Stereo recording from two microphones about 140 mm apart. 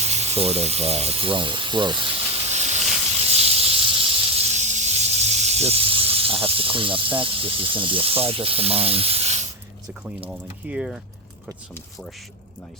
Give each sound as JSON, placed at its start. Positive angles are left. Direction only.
{"t": 0.0, "sound": "speech", "side_deg": -50}
{"t": 3.2, "sound": "snake", "side_deg": -45}
{"t": 4.5, "sound": "speech", "side_deg": -55}
{"t": 10.2, "sound": "speech", "side_deg": -5}